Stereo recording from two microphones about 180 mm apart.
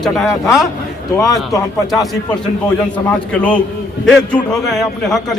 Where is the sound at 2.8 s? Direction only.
5° left (ahead or behind).